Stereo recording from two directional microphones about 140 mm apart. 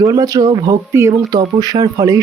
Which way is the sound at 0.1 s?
25° right (ahead or behind).